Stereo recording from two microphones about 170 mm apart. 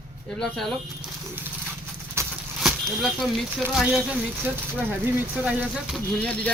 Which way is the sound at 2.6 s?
Centre (ahead or behind).